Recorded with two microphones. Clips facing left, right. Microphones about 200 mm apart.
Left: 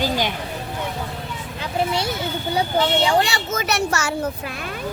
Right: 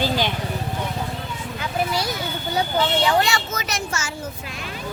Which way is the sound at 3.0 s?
35° left (ahead or behind).